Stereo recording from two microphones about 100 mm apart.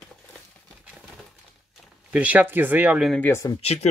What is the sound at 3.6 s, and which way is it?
Speech, 90° left.